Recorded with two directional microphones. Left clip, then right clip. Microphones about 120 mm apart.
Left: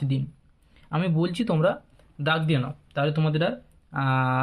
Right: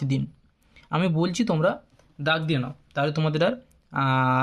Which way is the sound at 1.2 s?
30° right (ahead or behind).